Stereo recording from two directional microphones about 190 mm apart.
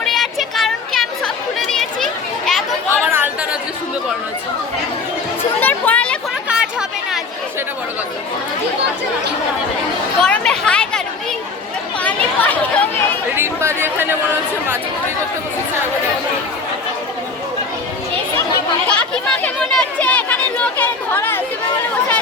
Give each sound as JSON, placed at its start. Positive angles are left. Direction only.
{"t": 0.0, "sound": "chatter", "side_deg": 0}
{"t": 2.9, "sound": "chatter", "side_deg": -10}
{"t": 5.5, "sound": "music", "side_deg": 10}
{"t": 6.5, "sound": "chatter", "side_deg": -5}
{"t": 10.2, "sound": "a sound", "side_deg": 5}
{"t": 12.0, "sound": "chatter", "side_deg": 10}
{"t": 13.3, "sound": "chatter", "side_deg": -15}
{"t": 18.9, "sound": "speech", "side_deg": 5}